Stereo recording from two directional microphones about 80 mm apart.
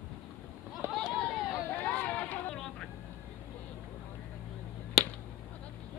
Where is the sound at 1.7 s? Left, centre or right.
Left.